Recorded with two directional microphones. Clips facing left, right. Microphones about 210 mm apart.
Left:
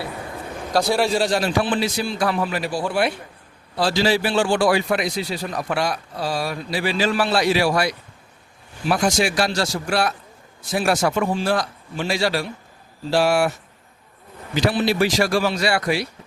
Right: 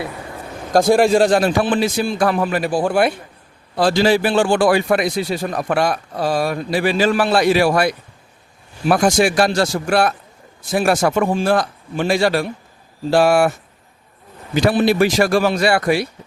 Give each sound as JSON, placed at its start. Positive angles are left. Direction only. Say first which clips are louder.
{"t": 0.7, "sound": "a man's voice", "louder": "right 7 dB", "side_deg": -50}
{"t": 14.5, "sound": "a man's voice", "louder": "right 5 dB", "side_deg": -50}